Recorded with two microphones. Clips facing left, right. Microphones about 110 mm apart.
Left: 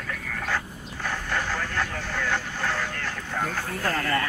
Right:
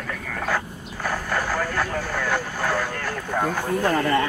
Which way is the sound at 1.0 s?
10° right (ahead or behind).